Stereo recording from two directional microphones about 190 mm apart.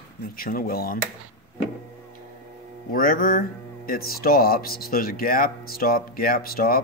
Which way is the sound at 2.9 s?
50° left (ahead or behind).